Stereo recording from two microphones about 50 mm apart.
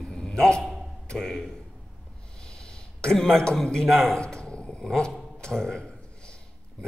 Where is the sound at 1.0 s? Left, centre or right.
Centre.